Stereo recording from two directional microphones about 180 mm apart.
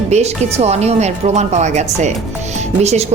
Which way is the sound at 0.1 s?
35° right (ahead or behind).